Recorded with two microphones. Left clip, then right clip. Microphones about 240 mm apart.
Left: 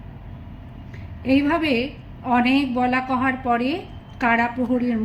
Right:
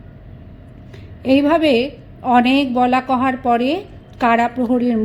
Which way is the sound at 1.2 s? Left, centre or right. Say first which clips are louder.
Right 6 dB; right.